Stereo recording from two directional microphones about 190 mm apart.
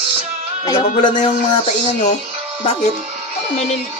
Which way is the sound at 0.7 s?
25° left (ahead or behind).